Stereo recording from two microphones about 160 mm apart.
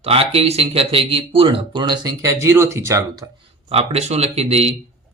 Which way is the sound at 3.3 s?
40° right (ahead or behind).